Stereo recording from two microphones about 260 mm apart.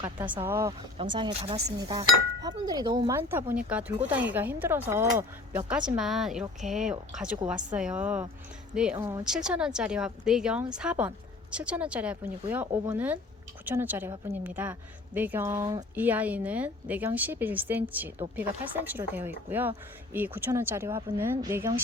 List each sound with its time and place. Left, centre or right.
0.0 s speech: centre
9.0 s speech: centre
9.2 s speech: centre